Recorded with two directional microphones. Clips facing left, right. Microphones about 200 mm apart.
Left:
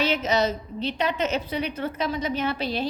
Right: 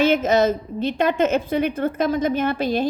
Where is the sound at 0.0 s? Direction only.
50° right (ahead or behind).